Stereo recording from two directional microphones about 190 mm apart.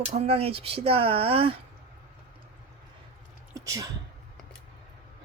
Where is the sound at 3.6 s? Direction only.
15° right (ahead or behind).